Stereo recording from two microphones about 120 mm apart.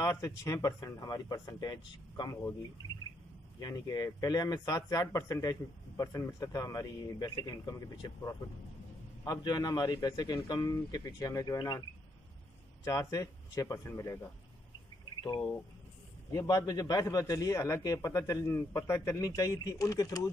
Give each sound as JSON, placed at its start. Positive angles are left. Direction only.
{"t": 0.0, "sound": "speech", "side_deg": 25}
{"t": 3.5, "sound": "speech", "side_deg": 30}
{"t": 12.8, "sound": "speech", "side_deg": 25}
{"t": 16.3, "sound": "speech", "side_deg": 30}